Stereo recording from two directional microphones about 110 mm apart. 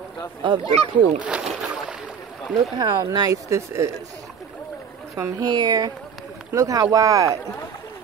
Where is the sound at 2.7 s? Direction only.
40° right (ahead or behind).